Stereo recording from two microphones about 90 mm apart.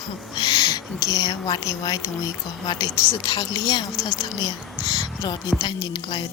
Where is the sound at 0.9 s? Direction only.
45° left (ahead or behind).